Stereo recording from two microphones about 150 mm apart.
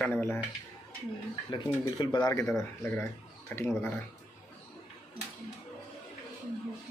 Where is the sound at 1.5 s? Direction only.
30° left (ahead or behind); by 3.7 s 15° left (ahead or behind).